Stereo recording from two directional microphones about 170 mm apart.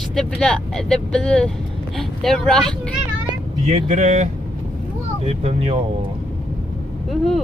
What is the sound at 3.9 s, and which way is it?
Speech, 45° right (ahead or behind).